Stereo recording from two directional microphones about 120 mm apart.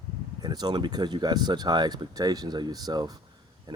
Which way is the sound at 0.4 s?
35° right (ahead or behind).